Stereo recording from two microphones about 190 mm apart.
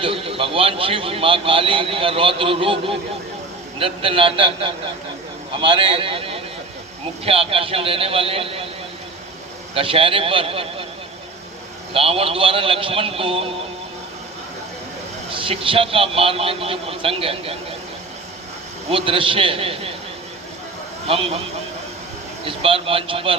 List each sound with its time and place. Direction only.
0.0 s a man's voice: 30° right (ahead or behind)
9.7 s a man's voice: 30° right (ahead or behind)
11.9 s a man's voice: 30° right (ahead or behind)
15.3 s a man's voice: 25° right (ahead or behind)
18.9 s a man's voice: 30° right (ahead or behind)
21.1 s a man's voice: 30° right (ahead or behind)
22.4 s a man's voice: 30° right (ahead or behind)